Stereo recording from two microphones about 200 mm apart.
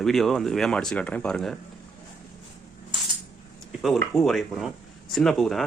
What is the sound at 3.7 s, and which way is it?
Speech, centre (ahead or behind).